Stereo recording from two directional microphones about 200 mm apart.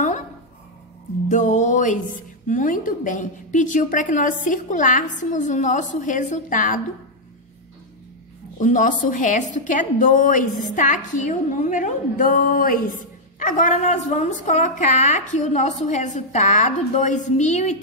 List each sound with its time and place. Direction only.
1.3 s a woman's voice: 35° left (ahead or behind)
8.5 s a woman's voice: 40° left (ahead or behind)